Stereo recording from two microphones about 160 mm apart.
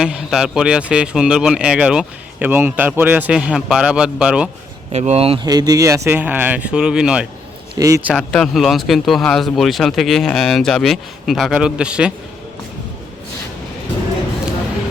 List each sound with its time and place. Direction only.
0.0 s speech: 5° right (ahead or behind)
4.9 s speech: 45° right (ahead or behind)
5.5 s speech: 25° right (ahead or behind); by 7.3 s 5° right (ahead or behind)
7.8 s a man's voice: 20° right (ahead or behind)
8.0 s speech: centre (ahead or behind)